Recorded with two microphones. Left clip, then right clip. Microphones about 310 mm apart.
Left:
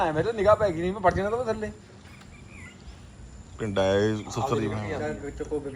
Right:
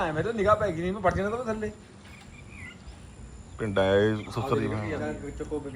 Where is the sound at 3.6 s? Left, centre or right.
Centre.